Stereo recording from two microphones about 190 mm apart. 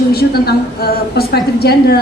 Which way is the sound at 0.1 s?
55° left (ahead or behind).